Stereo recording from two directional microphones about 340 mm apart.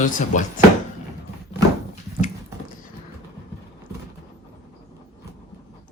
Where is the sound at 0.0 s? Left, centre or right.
Left.